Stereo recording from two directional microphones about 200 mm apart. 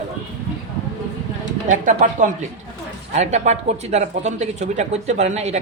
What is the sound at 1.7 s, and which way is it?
Speech, 40° right (ahead or behind).